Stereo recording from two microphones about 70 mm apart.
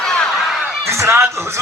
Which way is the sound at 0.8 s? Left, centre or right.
Right.